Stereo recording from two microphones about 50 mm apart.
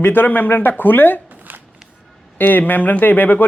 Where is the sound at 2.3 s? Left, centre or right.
Left.